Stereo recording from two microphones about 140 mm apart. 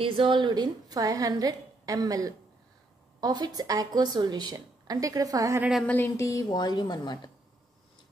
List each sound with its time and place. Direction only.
0.0 s a woman's voice: 40° right (ahead or behind)
5.6 s speech: centre (ahead or behind)
5.9 s a woman's voice: 15° left (ahead or behind); by 7.2 s 30° left (ahead or behind)